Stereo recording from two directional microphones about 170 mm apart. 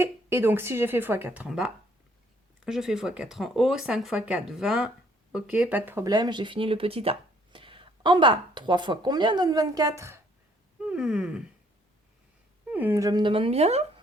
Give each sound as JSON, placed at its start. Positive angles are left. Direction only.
{"t": 0.0, "sound": "a woman's voice", "side_deg": -15}
{"t": 10.8, "sound": "a sound", "side_deg": -5}
{"t": 12.7, "sound": "speech", "side_deg": -15}